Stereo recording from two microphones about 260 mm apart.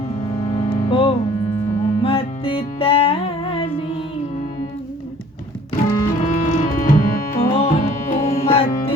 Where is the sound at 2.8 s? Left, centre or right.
Left.